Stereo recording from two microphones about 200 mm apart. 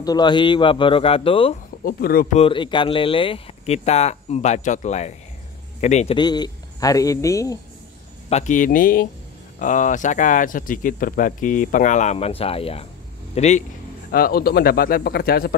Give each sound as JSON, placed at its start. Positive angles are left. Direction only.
{"t": 0.0, "sound": "a man's voice", "side_deg": 20}
{"t": 1.9, "sound": "speech", "side_deg": 45}
{"t": 2.3, "sound": "a man's voice", "side_deg": 25}
{"t": 6.1, "sound": "speech", "side_deg": 20}
{"t": 8.3, "sound": "speech", "side_deg": 35}
{"t": 14.1, "sound": "speech", "side_deg": 50}